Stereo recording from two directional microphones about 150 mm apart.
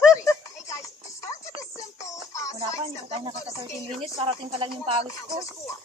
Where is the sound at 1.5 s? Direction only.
20° left (ahead or behind).